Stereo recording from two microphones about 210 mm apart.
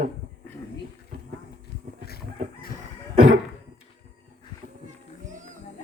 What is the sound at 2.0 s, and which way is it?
Chicken, 45° left (ahead or behind).